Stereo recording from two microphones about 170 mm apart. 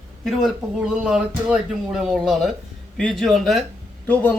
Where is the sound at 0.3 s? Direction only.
Centre (ahead or behind).